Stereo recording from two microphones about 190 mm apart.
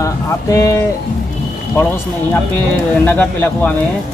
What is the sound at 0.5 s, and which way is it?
Speech, 15° left (ahead or behind).